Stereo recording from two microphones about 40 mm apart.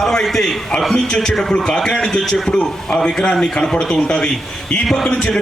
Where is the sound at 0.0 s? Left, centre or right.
Centre.